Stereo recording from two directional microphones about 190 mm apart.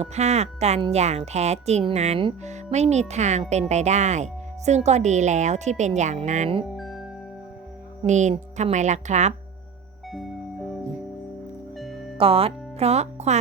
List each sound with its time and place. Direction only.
0.0 s a woman's voice: 35° right (ahead or behind)
6.7 s music: centre (ahead or behind)
8.0 s a woman's voice: 40° right (ahead or behind)
10.1 s music: centre (ahead or behind)
11.8 s music: centre (ahead or behind)
12.1 s speech: 30° right (ahead or behind)